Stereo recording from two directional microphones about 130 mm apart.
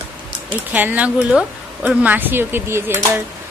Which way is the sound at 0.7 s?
10° right (ahead or behind).